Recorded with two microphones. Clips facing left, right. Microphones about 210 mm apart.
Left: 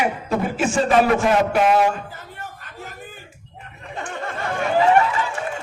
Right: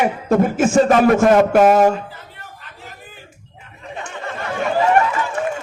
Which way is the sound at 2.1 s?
45° left (ahead or behind).